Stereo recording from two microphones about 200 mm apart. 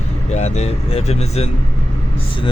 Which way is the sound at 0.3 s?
35° left (ahead or behind).